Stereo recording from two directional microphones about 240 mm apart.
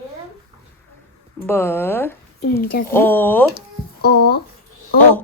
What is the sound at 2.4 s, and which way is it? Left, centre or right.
Speech, left.